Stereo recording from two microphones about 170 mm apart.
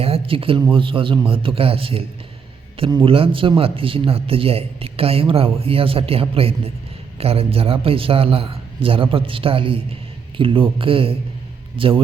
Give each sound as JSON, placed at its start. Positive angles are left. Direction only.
{"t": 0.0, "sound": "speech", "side_deg": -35}